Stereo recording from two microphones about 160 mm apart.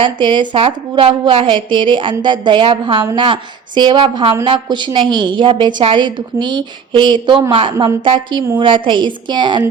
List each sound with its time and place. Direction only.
0.0 s a woman's voice: 30° right (ahead or behind)